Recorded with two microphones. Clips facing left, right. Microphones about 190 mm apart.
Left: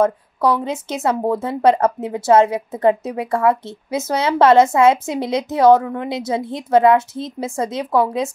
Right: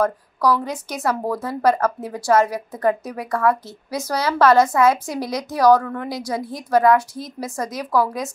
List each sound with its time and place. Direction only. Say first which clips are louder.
0.0 s a woman's voice: left 3 dB; 25° left (ahead or behind)